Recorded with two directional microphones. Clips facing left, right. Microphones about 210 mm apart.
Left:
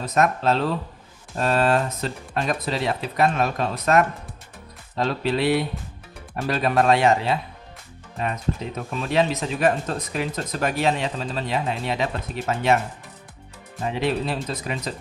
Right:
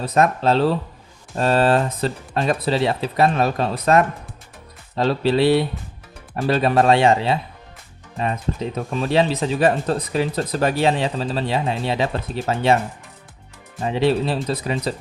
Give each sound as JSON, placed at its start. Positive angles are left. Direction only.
{"t": 0.0, "sound": "speech", "side_deg": -30}
{"t": 8.5, "sound": "speech", "side_deg": -30}
{"t": 13.9, "sound": "speech", "side_deg": -30}